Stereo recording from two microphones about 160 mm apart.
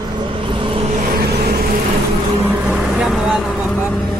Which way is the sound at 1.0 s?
70° right (ahead or behind).